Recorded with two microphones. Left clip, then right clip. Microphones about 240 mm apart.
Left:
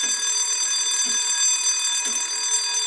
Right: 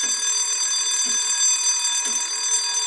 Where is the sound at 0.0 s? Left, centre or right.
Centre.